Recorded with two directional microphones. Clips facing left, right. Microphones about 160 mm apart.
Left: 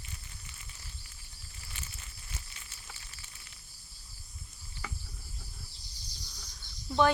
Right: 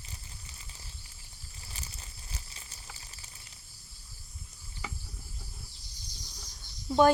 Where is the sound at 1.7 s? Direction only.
35° right (ahead or behind).